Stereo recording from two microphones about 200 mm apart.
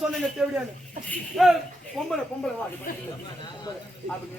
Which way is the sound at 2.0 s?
Centre (ahead or behind).